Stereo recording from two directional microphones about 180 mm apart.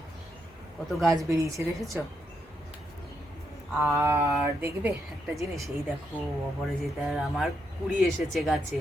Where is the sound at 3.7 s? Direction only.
15° right (ahead or behind).